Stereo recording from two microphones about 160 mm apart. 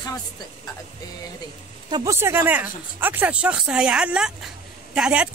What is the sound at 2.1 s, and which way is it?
Speech, 15° right (ahead or behind).